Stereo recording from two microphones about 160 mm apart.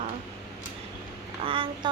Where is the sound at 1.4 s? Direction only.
30° right (ahead or behind).